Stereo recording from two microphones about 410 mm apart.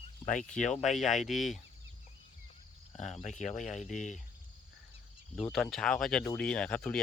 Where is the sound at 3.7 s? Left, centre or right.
Centre.